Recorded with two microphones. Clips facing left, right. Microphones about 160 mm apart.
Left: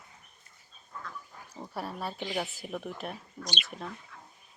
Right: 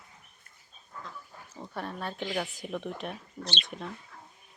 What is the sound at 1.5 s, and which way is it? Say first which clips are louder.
Speech: even; 10° left (ahead or behind).